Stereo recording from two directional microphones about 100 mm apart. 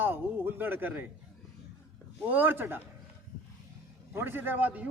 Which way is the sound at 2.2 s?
20° right (ahead or behind).